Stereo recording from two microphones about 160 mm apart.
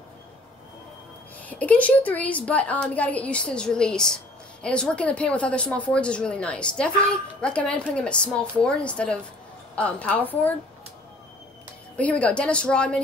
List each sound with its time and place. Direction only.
1.5 s a woman's voice: 10° left (ahead or behind)
12.0 s a woman's voice: 10° left (ahead or behind)